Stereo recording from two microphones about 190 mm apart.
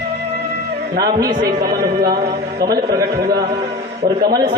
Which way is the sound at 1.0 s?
20° right (ahead or behind).